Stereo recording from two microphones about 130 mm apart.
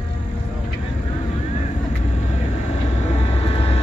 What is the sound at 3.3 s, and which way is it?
Vehicle, 50° left (ahead or behind).